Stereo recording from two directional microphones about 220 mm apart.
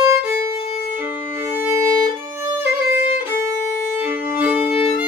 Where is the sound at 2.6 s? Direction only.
10° right (ahead or behind).